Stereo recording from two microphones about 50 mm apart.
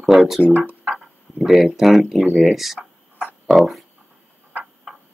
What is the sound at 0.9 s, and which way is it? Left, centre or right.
Speech, centre.